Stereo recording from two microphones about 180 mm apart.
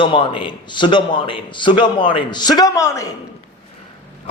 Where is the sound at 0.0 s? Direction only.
25° left (ahead or behind).